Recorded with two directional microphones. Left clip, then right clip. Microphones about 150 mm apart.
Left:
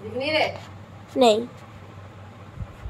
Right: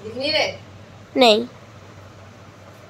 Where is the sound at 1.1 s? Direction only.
10° right (ahead or behind).